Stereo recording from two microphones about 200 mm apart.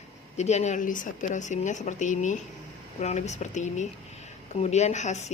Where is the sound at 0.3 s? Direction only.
35° left (ahead or behind).